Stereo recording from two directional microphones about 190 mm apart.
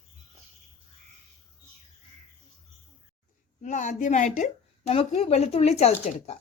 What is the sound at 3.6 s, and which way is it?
A woman's voice, 40° left (ahead or behind).